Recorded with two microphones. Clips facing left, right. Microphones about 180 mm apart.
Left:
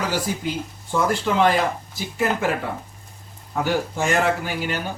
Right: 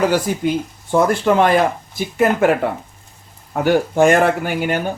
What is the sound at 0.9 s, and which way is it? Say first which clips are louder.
Speech: right 7 dB; 55° right (ahead or behind).